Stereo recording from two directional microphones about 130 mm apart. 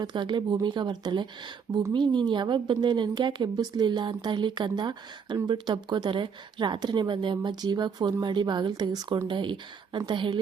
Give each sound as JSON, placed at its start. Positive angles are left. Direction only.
{"t": 0.0, "sound": "speech", "side_deg": -35}